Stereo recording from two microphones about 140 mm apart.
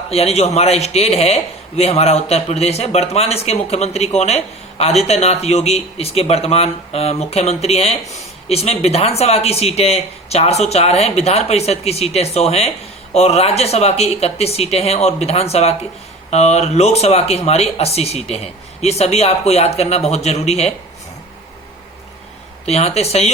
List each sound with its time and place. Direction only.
0.1 s a man's voice: 45° left (ahead or behind)
22.6 s a man's voice: 50° left (ahead or behind)